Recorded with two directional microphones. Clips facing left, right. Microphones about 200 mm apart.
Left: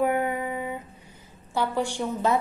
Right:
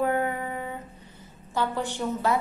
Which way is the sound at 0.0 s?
15° left (ahead or behind).